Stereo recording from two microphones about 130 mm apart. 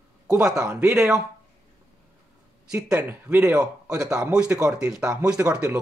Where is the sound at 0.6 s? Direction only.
10° right (ahead or behind).